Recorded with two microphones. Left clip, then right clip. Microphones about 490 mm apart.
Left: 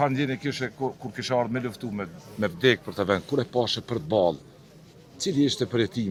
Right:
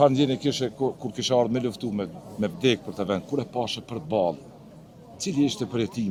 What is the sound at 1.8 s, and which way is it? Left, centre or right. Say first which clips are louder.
A man's voice: right 3 dB; left.